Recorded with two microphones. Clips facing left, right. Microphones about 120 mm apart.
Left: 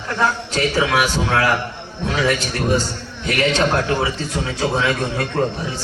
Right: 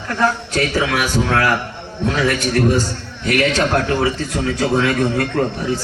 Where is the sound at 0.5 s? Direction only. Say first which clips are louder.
Even; 25° left (ahead or behind).